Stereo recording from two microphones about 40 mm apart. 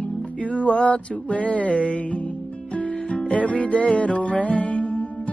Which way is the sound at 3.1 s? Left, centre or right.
Left.